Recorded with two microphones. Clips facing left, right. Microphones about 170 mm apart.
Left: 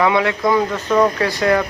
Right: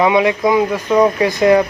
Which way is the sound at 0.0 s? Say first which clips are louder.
Right 3 dB; 20° right (ahead or behind).